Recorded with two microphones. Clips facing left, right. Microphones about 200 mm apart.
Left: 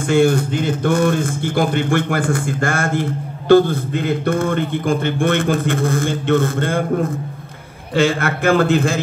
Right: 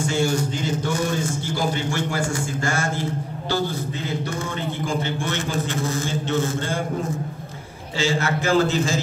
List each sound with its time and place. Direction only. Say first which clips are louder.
0.1 s a man's voice: left 12 dB; 55° left (ahead or behind)